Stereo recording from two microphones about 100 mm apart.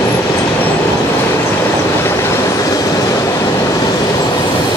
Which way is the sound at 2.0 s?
25° left (ahead or behind).